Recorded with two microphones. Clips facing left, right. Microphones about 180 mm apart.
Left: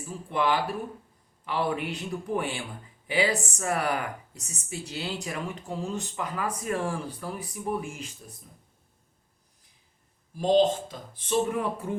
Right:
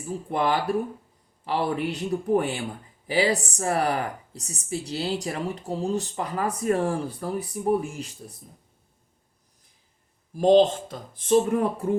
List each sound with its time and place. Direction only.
0.1 s speech: 40° right (ahead or behind)
10.3 s speech: 45° right (ahead or behind)